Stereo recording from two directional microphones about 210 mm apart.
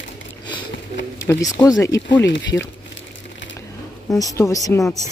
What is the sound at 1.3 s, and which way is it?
Speech, 15° left (ahead or behind).